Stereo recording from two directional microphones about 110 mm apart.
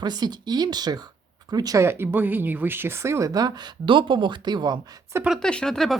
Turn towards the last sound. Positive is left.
turn(degrees=5)  # may be behind; listen again after turning